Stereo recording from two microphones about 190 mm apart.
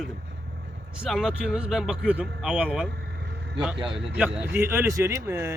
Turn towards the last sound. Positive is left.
turn(degrees=-15)  # may be behind; listen again after turning